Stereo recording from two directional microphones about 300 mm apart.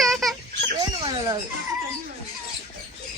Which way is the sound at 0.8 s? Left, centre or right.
Centre.